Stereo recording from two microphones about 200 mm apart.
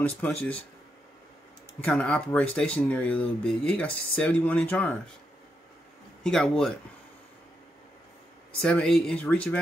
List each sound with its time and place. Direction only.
0.2 s speech: 10° left (ahead or behind)
1.8 s speech: 5° left (ahead or behind)
6.2 s speech: 5° left (ahead or behind)
8.5 s speech: 5° left (ahead or behind)